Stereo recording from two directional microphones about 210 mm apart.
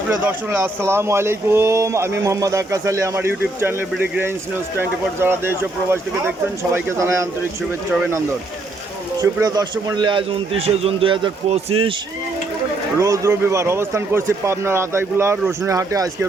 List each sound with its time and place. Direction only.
0.3 s speech: 10° right (ahead or behind)
9.2 s a man's voice: 15° right (ahead or behind)
13.0 s speech: 15° right (ahead or behind)